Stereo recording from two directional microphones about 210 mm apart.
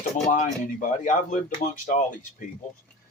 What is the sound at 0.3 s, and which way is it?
Speech, 35° left (ahead or behind).